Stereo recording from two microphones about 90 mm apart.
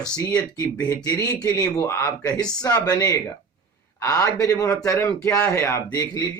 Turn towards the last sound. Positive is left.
turn(degrees=30)  # may be behind; listen again after turning